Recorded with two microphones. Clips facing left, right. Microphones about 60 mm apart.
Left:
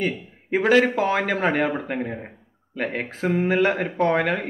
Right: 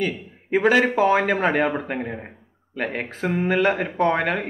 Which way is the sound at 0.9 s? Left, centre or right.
Centre.